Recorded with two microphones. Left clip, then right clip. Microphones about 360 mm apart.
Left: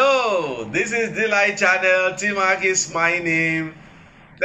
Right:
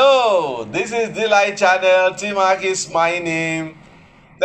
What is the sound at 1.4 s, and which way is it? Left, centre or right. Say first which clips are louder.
Speech: right 2 dB; centre.